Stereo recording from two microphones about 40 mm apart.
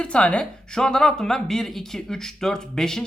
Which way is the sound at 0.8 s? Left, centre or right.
Centre.